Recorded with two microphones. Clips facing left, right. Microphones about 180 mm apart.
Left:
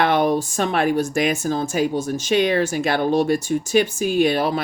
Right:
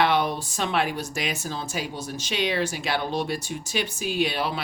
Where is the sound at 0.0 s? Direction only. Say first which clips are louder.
Left 5 dB; 50° left (ahead or behind).